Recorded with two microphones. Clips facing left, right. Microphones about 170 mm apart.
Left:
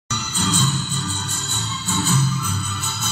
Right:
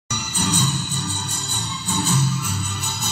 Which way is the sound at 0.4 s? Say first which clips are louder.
Left 1 dB; 20° right (ahead or behind).